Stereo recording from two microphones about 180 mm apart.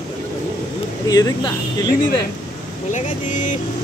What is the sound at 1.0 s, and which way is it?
Speech, 20° left (ahead or behind).